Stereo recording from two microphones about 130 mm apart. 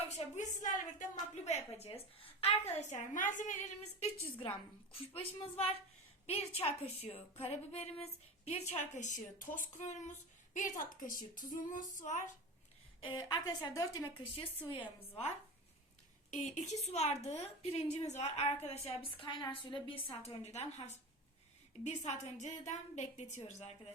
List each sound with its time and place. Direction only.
0.3 s a woman's voice: 75° left (ahead or behind)
1.5 s a woman's voice: 55° left (ahead or behind); by 11.2 s 90° left
11.3 s female singing: 90° left
13.1 s a woman's voice: 30° left (ahead or behind)
14.7 s a woman's voice: 40° left (ahead or behind)
16.3 s a woman's voice: 65° left (ahead or behind)